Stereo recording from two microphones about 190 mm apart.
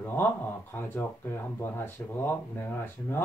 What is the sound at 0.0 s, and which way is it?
Speech, 10° left (ahead or behind).